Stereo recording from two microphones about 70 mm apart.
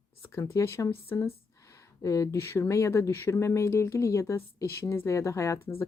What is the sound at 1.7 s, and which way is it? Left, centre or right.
Speech, left.